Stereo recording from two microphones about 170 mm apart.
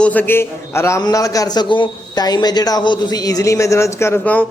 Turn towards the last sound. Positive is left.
turn(degrees=10)  # may be behind; listen again after turning